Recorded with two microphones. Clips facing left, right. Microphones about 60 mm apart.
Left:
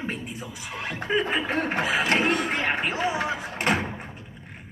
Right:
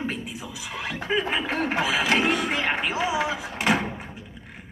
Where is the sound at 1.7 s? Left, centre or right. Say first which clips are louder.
Right 1 dB; left.